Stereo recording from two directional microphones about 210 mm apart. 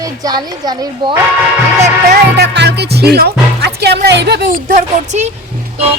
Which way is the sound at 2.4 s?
55° right (ahead or behind).